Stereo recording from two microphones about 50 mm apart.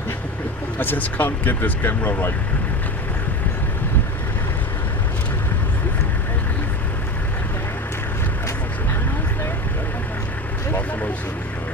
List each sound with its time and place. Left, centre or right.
0.7 s speech: left